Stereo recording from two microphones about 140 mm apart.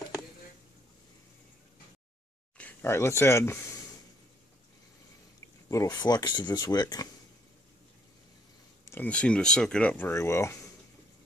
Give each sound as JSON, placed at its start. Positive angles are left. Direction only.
{"t": 2.5, "sound": "speech", "side_deg": 15}
{"t": 5.7, "sound": "speech", "side_deg": 25}
{"t": 8.8, "sound": "speech", "side_deg": 15}